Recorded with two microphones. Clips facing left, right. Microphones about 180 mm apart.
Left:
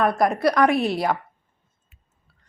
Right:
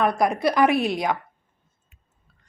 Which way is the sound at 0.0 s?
Centre (ahead or behind).